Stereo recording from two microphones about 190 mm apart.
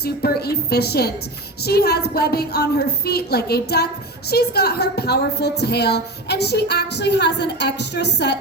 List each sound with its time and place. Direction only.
0.0 s a woman's voice: 55° left (ahead or behind)